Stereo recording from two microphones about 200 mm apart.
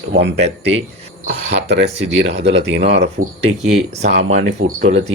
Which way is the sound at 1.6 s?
60° right (ahead or behind).